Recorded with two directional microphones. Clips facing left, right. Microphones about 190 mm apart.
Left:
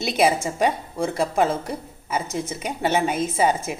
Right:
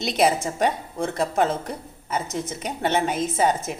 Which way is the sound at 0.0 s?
5° left (ahead or behind).